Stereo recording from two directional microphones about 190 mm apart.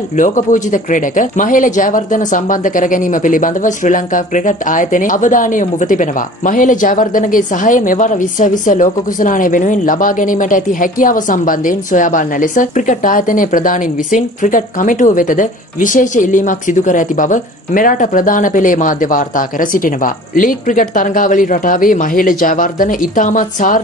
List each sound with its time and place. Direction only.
0.2 s speech: 45° left (ahead or behind)